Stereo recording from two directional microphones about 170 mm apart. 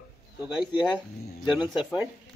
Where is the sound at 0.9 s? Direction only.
5° right (ahead or behind).